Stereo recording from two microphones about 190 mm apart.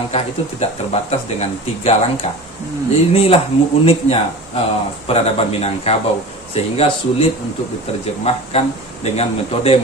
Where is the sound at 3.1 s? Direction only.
30° left (ahead or behind).